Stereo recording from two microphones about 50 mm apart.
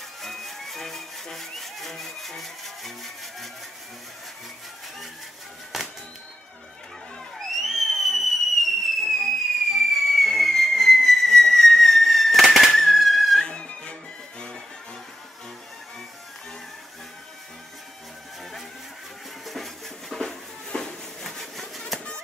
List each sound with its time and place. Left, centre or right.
0.2 s music: centre
5.7 s music: centre
7.3 s a sound: centre
9.2 s whistle: centre
13.4 s music: centre
19.4 s a sound: centre